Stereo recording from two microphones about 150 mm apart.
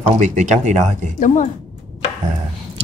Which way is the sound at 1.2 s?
55° left (ahead or behind).